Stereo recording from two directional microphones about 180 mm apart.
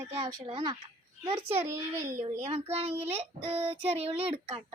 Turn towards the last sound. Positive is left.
turn(degrees=-35)  # may be behind; listen again after turning